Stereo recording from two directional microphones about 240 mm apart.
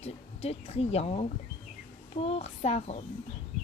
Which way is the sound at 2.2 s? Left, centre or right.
Left.